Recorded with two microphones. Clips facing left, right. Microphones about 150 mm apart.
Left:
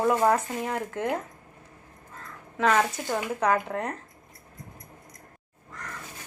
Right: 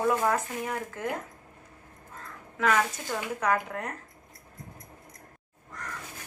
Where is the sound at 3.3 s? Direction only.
30° left (ahead or behind).